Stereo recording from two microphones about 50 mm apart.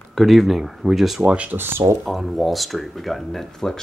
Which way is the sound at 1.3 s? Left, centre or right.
Right.